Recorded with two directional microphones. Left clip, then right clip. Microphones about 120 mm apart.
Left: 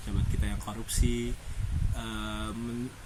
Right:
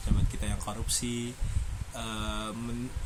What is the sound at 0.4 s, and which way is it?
Speech, 25° right (ahead or behind).